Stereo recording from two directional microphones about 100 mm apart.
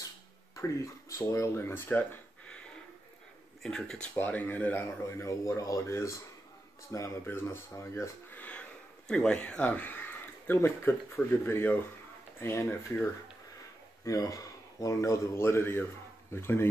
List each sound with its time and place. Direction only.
0.6 s speech: 35° left (ahead or behind); by 2.6 s 15° left (ahead or behind)
3.6 s speech: 5° left (ahead or behind)
4.8 s speech: 30° left (ahead or behind)
14.0 s a man's voice: 35° left (ahead or behind)